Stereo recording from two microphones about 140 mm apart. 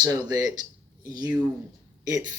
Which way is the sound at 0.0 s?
25° right (ahead or behind).